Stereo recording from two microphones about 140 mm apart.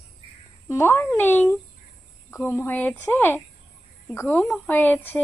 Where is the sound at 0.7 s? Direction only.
15° left (ahead or behind).